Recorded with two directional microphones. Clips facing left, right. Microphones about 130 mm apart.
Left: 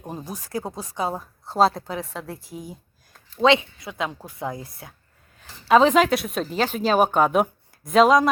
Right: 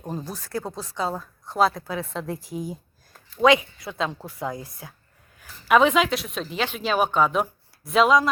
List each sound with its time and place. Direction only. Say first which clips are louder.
0.0 s speech: right 1 dB; 10° left (ahead or behind); by 1.8 s 30° left (ahead or behind)
1.9 s a woman's voice: right 2 dB; 15° left (ahead or behind)
3.4 s speech: even; 25° left (ahead or behind)
5.4 s a sound: left 2 dB; 30° left (ahead or behind)
5.9 s speech: left 4 dB; 50° left (ahead or behind)
6.5 s speech: left 4 dB; 40° left (ahead or behind)